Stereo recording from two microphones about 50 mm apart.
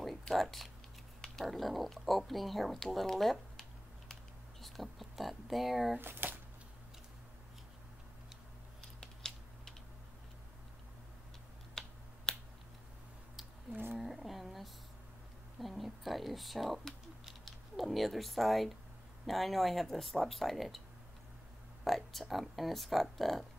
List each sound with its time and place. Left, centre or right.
0.3 s speech: centre
5.9 s speech: right
9.0 s a sound: centre
11.8 s finger snapping: centre
13.7 s speech: right
13.9 s speech: centre
21.8 s speech: centre